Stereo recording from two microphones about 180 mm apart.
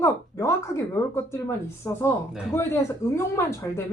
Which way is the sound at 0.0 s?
15° left (ahead or behind).